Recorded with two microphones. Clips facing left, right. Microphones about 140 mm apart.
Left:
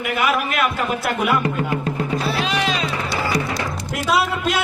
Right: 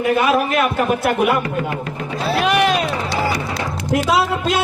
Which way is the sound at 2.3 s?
60° right (ahead or behind).